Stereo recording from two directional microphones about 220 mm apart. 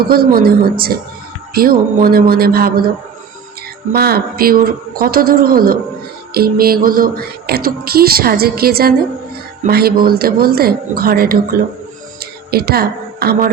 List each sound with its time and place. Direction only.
0.1 s music: 40° right (ahead or behind)
3.9 s speech: 45° right (ahead or behind)
6.3 s music: 45° right (ahead or behind)
12.2 s a woman's voice: 45° right (ahead or behind)